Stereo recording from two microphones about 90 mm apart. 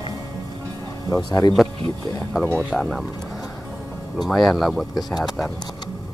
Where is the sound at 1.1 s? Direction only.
45° left (ahead or behind).